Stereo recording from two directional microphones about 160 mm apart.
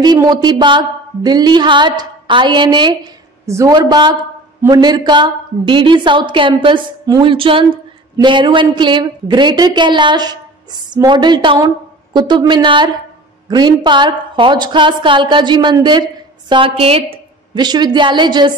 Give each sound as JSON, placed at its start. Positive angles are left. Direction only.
{"t": 0.0, "sound": "a woman's voice", "side_deg": -25}